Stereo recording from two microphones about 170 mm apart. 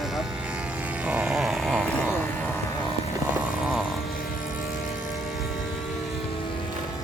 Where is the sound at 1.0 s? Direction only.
5° right (ahead or behind).